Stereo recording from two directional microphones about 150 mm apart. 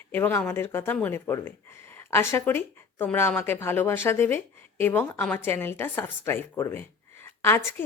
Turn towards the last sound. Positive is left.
turn(degrees=15)  # may be behind; listen again after turning